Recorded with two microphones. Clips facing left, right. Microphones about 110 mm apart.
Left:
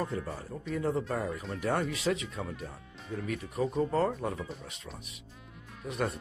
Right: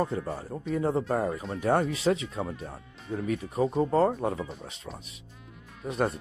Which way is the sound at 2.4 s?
Centre (ahead or behind).